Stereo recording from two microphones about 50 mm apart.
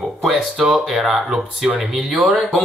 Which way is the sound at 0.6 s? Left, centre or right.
Centre.